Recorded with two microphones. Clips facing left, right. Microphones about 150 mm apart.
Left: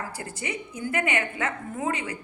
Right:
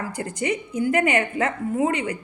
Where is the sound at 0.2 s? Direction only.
35° right (ahead or behind).